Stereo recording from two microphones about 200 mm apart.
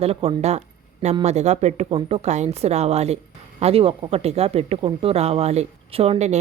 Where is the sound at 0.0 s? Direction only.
30° right (ahead or behind).